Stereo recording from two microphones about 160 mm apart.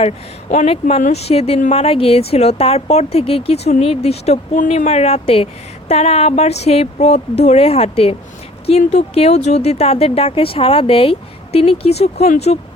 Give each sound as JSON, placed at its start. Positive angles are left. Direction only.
{"t": 0.5, "sound": "speech", "side_deg": 40}